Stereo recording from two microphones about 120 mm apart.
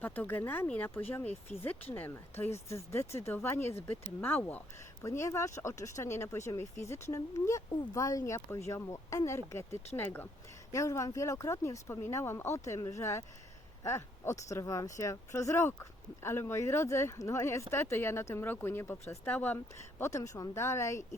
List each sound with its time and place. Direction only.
0.0 s speech: 15° left (ahead or behind)
1.5 s speech: 65° left (ahead or behind)
1.9 s speech: 15° left (ahead or behind)